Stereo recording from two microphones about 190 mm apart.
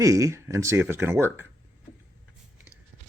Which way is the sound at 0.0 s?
15° right (ahead or behind).